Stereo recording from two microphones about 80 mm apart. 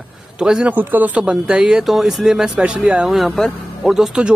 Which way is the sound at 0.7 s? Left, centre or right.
Right.